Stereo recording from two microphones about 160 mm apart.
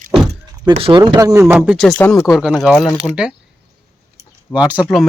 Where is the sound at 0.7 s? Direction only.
35° right (ahead or behind).